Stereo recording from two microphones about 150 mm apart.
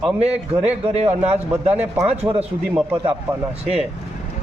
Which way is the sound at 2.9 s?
35° right (ahead or behind).